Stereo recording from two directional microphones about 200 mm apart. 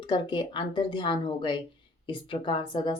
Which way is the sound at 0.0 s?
25° left (ahead or behind).